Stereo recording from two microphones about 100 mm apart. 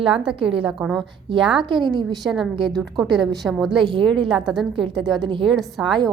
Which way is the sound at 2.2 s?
Centre (ahead or behind).